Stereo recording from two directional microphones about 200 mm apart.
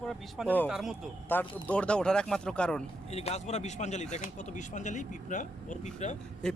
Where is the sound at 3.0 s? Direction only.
30° left (ahead or behind).